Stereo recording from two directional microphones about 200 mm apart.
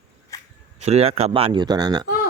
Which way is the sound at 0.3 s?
15° left (ahead or behind).